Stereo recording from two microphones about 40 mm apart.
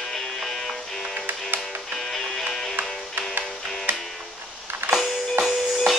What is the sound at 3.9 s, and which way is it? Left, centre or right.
Music, right.